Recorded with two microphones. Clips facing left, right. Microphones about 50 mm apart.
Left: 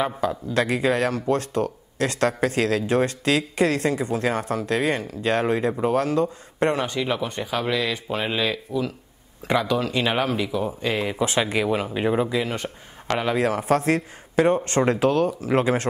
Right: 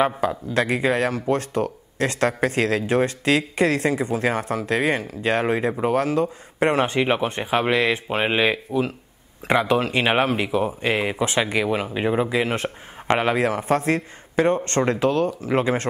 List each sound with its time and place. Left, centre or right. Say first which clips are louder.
0.3 s speech: right 1 dB; centre
6.7 s speech: right 4 dB; right
7.0 s speech: right 4 dB; right
11.1 s speech: right 1 dB; centre
12.4 s speech: right 3 dB; right
13.4 s speech: even; centre